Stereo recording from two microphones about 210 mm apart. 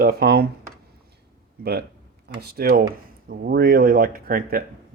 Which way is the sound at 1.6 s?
50° right (ahead or behind).